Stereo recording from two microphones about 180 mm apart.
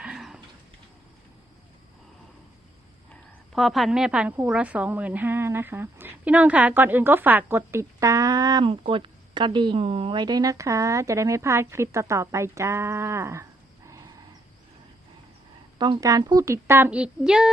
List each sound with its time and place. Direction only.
0.0 s a sound: 5° right (ahead or behind)
3.5 s a woman's voice: centre (ahead or behind); by 14.0 s 15° right (ahead or behind)
15.8 s a woman's voice: 20° right (ahead or behind); by 17.5 s 5° right (ahead or behind)